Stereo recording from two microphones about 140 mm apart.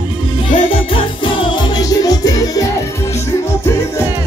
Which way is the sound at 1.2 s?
35° left (ahead or behind).